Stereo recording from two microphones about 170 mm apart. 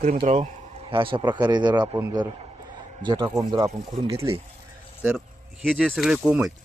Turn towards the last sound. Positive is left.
turn(degrees=-5)  # may be behind; listen again after turning